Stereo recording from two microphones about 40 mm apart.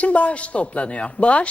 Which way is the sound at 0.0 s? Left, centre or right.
Left.